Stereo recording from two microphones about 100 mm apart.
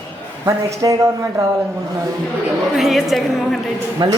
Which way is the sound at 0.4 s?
35° right (ahead or behind).